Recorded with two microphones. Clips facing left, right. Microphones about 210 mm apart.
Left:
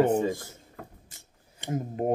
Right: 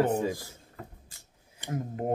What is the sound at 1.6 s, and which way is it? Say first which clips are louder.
Speech: left 3 dB; 25° left (ahead or behind).